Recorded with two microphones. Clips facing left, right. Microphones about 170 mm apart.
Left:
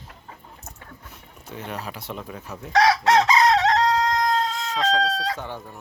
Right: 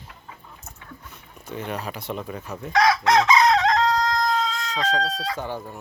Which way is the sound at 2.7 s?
35° left (ahead or behind).